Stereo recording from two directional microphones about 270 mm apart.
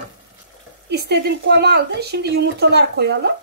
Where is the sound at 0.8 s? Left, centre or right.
Right.